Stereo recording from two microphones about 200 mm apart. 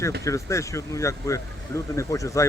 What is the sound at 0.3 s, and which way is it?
Speech, 15° left (ahead or behind).